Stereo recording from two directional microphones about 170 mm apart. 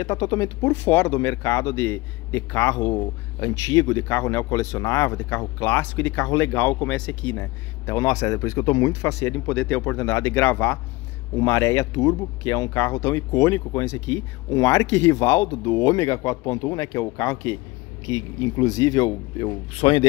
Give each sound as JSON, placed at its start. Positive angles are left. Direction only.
{"t": 0.0, "sound": "speech", "side_deg": 25}